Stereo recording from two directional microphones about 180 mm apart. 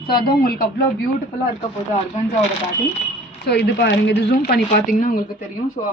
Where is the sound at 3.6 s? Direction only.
70° left (ahead or behind).